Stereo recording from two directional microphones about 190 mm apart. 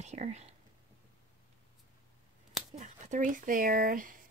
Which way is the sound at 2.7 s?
40° right (ahead or behind).